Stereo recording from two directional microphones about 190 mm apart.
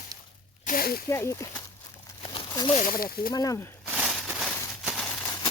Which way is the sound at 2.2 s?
25° left (ahead or behind).